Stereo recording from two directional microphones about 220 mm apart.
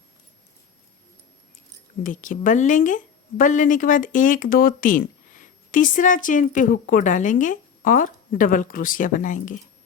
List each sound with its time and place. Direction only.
2.0 s a woman's voice: 35° left (ahead or behind)